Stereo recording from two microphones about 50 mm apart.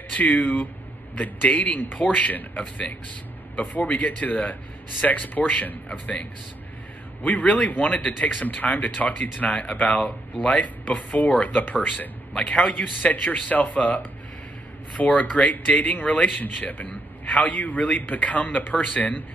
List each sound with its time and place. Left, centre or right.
0.1 s a man's voice: left
7.2 s a man's voice: left
12.4 s a man's voice: left